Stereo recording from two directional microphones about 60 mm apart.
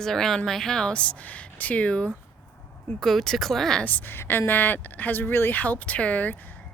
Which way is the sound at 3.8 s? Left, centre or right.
Left.